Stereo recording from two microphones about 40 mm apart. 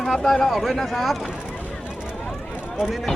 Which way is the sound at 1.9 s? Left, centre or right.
Right.